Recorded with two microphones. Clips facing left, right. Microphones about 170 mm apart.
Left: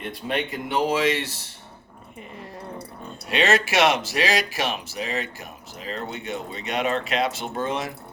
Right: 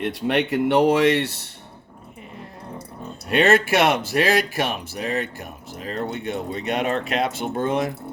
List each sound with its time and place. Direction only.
0.0 s speech: 75° right (ahead or behind)
3.2 s speech: 55° right (ahead or behind)